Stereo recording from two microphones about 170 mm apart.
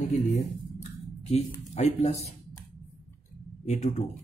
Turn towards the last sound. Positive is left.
turn(degrees=45)  # may be behind; listen again after turning